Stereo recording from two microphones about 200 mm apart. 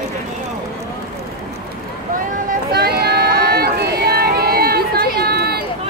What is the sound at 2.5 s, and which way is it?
Run, 50° right (ahead or behind).